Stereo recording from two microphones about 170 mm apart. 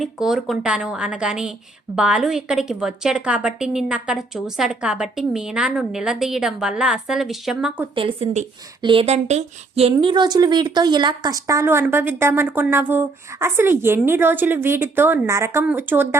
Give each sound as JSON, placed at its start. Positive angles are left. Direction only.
{"t": 0.0, "sound": "a woman's voice", "side_deg": -5}
{"t": 7.9, "sound": "speech", "side_deg": -35}
{"t": 9.9, "sound": "a woman's voice", "side_deg": -25}